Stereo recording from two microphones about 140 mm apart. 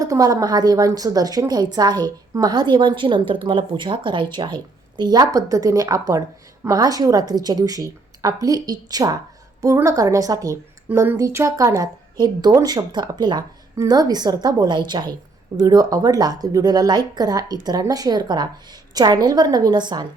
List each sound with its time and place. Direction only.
0.0 s a woman's voice: 25° right (ahead or behind)